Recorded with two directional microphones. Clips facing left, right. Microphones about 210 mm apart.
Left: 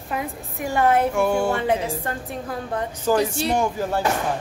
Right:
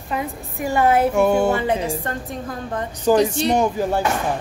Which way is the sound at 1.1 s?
20° right (ahead or behind).